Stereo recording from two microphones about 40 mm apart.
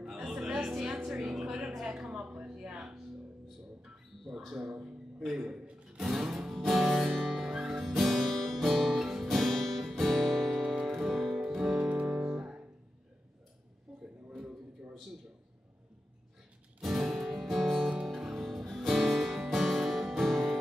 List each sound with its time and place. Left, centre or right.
0.7 s music: centre
1.3 s a sound: centre
4.2 s mouse: centre
4.6 s a sound: centre
5.5 s a sound: right
5.9 s music: centre
7.1 s music: centre
7.3 s music: centre
9.4 s guitar: centre
10.6 s guitar: right
11.0 s music: centre
11.7 s music: right
16.8 s music: centre